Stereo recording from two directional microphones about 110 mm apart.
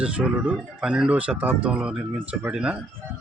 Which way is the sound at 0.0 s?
10° right (ahead or behind).